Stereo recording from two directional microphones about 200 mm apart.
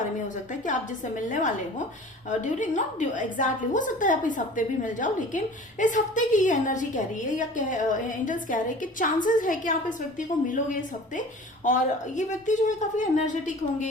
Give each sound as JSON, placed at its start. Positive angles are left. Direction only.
{"t": 0.6, "sound": "a woman's voice", "side_deg": 40}